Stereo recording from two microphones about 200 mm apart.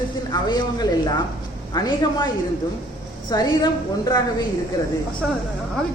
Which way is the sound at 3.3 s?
20° left (ahead or behind).